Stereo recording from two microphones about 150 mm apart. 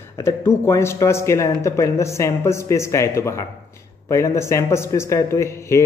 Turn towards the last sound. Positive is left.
turn(degrees=20)  # may be behind; listen again after turning